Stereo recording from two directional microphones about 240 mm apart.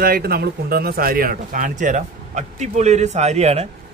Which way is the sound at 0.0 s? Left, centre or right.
Right.